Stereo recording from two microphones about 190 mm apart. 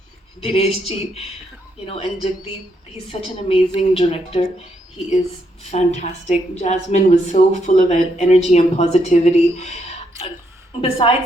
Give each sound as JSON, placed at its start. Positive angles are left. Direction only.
{"t": 0.4, "sound": "a woman's voice", "side_deg": 30}
{"t": 5.7, "sound": "a woman's voice", "side_deg": 35}